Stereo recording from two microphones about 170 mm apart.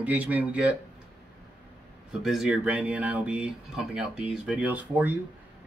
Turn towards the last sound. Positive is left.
turn(degrees=-10)  # may be behind; listen again after turning